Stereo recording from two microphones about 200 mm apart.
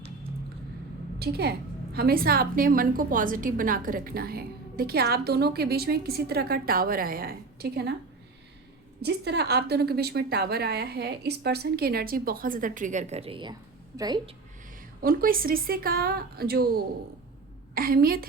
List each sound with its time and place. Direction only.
1.2 s a woman's voice: 55° right (ahead or behind)
9.0 s a woman's voice: 55° right (ahead or behind); by 14.2 s 20° right (ahead or behind)
15.0 s a woman's voice: 45° right (ahead or behind)